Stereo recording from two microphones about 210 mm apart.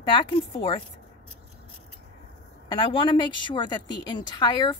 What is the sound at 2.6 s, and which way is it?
A woman's voice, 25° left (ahead or behind).